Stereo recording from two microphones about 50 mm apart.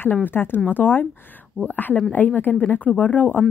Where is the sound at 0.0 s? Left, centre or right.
Left.